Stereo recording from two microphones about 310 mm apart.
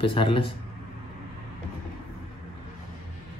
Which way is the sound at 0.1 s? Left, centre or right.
Centre.